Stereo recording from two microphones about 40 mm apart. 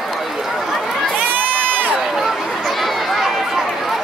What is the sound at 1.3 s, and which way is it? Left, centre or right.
Crowd, right.